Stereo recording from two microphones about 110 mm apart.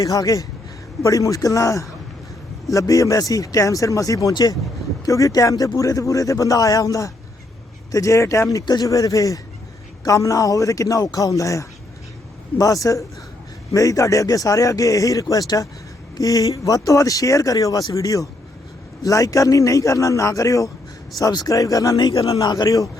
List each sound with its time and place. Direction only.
0.0 s speech: 30° left (ahead or behind)